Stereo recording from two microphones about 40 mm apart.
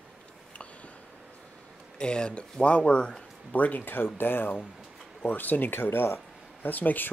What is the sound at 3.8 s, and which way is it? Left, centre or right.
Speech, left.